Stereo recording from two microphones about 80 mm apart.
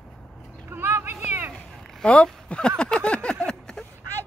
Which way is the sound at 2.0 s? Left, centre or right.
Centre.